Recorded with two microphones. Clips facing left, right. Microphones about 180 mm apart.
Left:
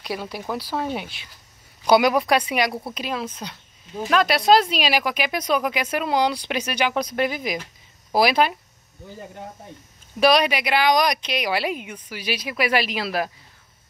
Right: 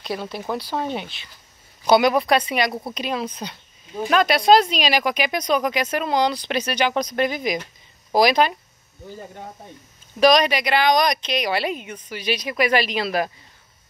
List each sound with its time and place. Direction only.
0.0 s a woman's voice: 10° left (ahead or behind)
10.2 s speech: 10° left (ahead or behind)